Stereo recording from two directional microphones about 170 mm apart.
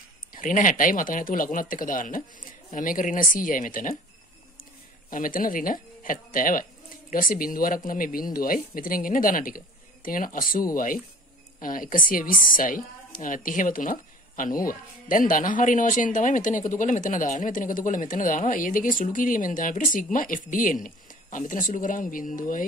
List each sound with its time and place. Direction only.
0.3 s speech: 50° left (ahead or behind)
5.1 s speech: 55° left (ahead or behind)